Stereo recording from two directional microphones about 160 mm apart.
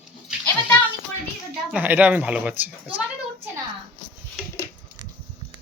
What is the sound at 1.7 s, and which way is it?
Speech, 10° right (ahead or behind).